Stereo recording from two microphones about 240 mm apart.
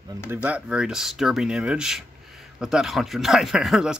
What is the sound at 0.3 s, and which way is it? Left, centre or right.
A man's voice, centre.